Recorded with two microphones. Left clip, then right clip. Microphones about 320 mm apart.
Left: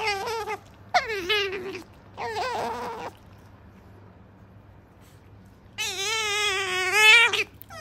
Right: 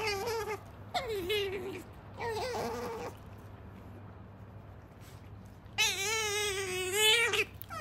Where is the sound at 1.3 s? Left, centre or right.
Left.